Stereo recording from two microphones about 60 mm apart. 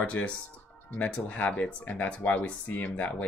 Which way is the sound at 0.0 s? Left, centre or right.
Centre.